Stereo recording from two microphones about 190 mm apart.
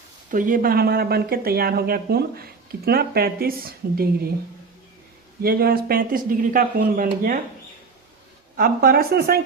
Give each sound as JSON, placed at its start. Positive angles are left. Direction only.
{"t": 0.3, "sound": "speech", "side_deg": -45}
{"t": 5.4, "sound": "speech", "side_deg": -55}
{"t": 8.5, "sound": "speech", "side_deg": -50}